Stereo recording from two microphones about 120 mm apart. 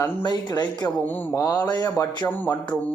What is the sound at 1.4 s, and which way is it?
A man's voice, 30° left (ahead or behind).